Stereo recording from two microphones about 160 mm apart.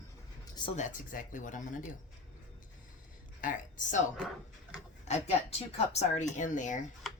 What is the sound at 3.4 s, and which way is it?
Speech, 55° left (ahead or behind).